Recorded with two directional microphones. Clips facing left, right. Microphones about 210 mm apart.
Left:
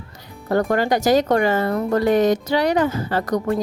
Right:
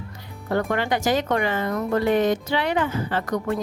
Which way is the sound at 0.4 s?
40° left (ahead or behind).